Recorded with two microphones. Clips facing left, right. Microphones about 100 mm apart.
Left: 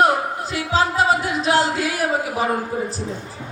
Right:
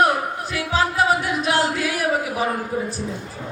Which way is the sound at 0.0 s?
30° left (ahead or behind).